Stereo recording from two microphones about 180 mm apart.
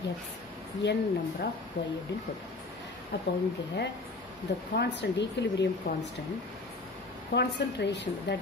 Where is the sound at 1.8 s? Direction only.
70° left (ahead or behind).